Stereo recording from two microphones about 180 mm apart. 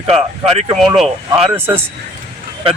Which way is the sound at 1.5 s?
10° right (ahead or behind).